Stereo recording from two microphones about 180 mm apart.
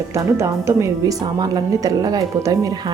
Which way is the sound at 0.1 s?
15° right (ahead or behind).